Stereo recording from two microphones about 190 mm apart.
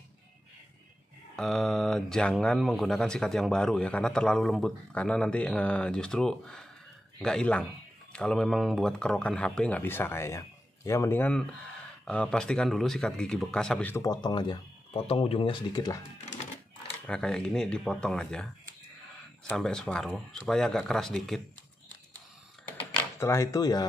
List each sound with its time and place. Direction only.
1.3 s speech: 5° left (ahead or behind)
14.0 s speech: 20° left (ahead or behind)
17.0 s speech: 5° left (ahead or behind)
23.1 s speech: 15° left (ahead or behind)